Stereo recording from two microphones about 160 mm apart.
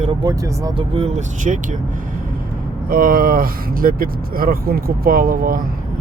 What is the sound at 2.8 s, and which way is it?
Speech, 60° right (ahead or behind).